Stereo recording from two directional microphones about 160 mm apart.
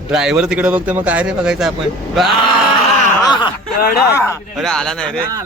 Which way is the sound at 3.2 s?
30° left (ahead or behind).